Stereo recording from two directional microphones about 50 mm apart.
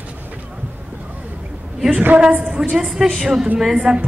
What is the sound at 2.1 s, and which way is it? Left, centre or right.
Speech, right.